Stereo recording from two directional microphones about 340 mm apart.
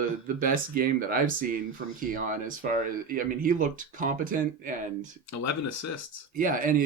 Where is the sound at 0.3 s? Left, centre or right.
Right.